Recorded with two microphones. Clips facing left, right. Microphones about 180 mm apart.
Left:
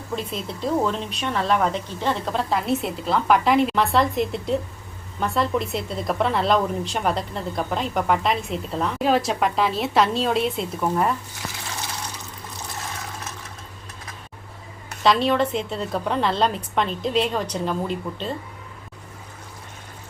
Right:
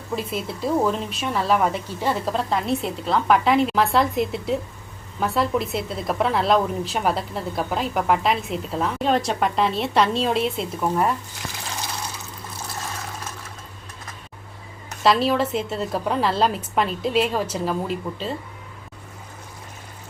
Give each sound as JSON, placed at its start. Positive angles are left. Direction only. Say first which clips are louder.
{"t": 0.2, "sound": "a woman's voice", "louder": "right 2 dB", "side_deg": -5}
{"t": 15.0, "sound": "a woman's voice", "louder": "even", "side_deg": -5}